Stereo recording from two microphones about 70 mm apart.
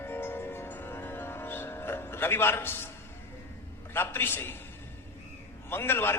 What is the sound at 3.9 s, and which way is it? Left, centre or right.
Speech, left.